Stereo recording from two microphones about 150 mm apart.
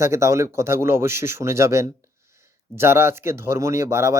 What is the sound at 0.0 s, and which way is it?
Speech, 20° right (ahead or behind).